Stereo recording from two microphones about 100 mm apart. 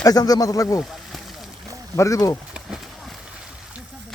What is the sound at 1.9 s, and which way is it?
Speech, 35° left (ahead or behind).